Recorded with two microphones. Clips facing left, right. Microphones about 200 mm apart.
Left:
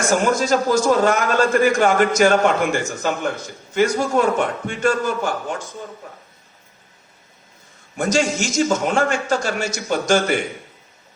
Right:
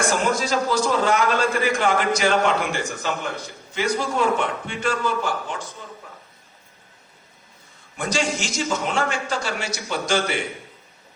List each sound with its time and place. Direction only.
0.1 s a man's voice: 45° left (ahead or behind)
7.9 s a man's voice: 45° left (ahead or behind)